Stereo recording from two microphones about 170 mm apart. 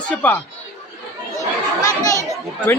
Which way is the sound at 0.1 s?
10° left (ahead or behind).